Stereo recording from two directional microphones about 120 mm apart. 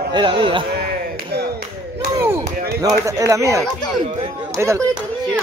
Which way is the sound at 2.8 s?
25° right (ahead or behind).